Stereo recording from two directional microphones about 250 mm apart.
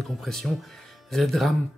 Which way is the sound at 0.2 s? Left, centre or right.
Centre.